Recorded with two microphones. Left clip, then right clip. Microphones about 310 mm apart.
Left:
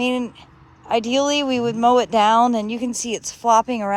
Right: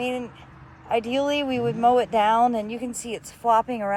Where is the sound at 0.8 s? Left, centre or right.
Left.